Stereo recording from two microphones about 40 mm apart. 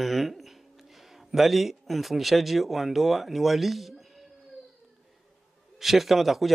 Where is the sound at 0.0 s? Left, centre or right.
Centre.